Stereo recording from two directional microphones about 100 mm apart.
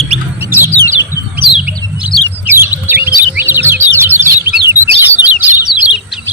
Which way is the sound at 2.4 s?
20° right (ahead or behind).